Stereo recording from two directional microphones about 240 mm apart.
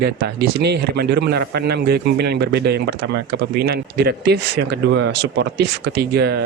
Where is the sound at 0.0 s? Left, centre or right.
Right.